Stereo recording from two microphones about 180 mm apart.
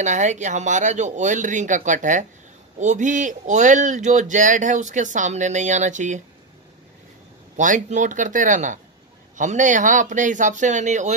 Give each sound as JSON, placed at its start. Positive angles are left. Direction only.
{"t": 0.0, "sound": "speech", "side_deg": -40}
{"t": 7.5, "sound": "speech", "side_deg": -45}